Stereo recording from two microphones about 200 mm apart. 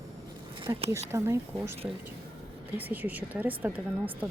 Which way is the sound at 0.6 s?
25° right (ahead or behind).